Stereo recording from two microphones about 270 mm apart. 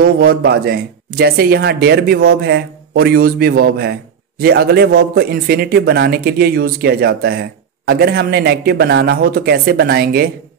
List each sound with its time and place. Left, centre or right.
0.0 s a man's voice: right